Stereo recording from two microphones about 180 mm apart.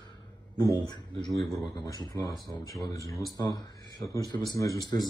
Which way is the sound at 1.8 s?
20° left (ahead or behind).